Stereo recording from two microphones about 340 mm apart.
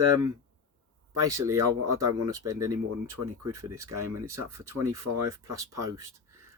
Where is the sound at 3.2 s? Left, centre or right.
Right.